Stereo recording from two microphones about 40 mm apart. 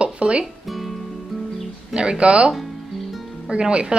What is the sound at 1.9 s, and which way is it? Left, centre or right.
Speech, right.